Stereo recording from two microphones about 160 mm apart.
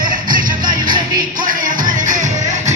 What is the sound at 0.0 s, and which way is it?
Music, 60° right (ahead or behind).